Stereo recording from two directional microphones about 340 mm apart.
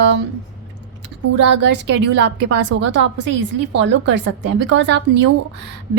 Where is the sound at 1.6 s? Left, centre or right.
Right.